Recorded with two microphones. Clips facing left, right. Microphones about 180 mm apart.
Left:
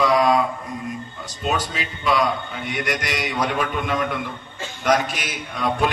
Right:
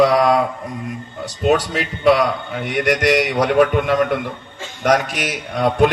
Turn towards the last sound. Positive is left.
turn(degrees=-70)  # may be behind; listen again after turning